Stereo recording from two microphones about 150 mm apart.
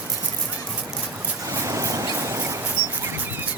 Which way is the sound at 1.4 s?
20° right (ahead or behind).